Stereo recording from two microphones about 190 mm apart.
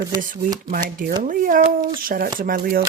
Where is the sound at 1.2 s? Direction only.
45° right (ahead or behind).